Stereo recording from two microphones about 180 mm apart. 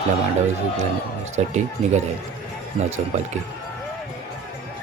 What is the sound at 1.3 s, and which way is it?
Speech, 40° right (ahead or behind).